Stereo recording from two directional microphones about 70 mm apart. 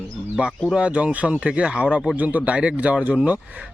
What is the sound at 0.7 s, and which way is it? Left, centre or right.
Speech, centre.